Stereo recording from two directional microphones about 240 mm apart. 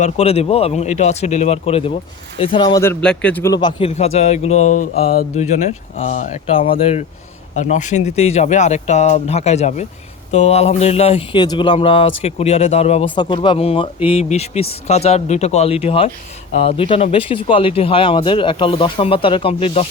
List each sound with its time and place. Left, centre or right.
0.0 s speech: left